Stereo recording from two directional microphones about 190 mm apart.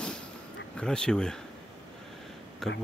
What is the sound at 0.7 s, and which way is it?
Speech, 5° left (ahead or behind).